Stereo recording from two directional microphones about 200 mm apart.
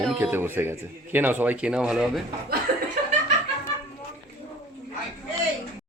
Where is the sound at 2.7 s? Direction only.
40° right (ahead or behind).